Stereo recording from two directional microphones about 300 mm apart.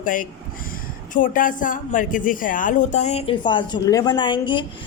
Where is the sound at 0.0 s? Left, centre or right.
Left.